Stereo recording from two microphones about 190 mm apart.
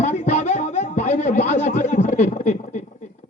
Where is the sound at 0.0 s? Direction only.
35° left (ahead or behind).